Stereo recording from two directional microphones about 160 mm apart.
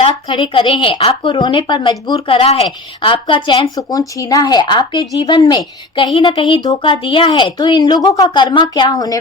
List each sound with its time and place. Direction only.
0.0 s a woman's voice: 30° left (ahead or behind)